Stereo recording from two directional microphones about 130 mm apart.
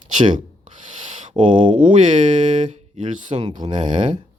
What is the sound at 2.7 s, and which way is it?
Speech, 70° right (ahead or behind).